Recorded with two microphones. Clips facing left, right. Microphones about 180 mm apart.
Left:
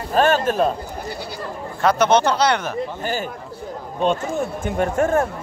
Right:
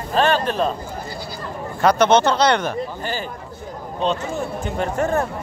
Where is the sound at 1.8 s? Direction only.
10° left (ahead or behind).